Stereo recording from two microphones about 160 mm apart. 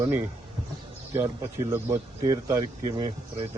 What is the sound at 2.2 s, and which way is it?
Speech, 20° right (ahead or behind).